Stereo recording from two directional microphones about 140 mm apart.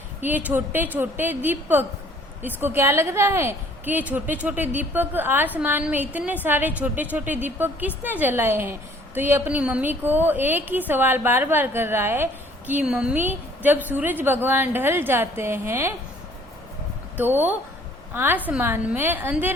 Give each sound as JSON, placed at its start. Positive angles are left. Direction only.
{"t": 0.2, "sound": "a woman's voice", "side_deg": -10}
{"t": 17.2, "sound": "a woman's voice", "side_deg": -15}